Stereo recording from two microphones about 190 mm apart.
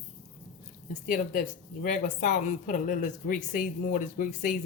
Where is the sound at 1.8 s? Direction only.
40° left (ahead or behind).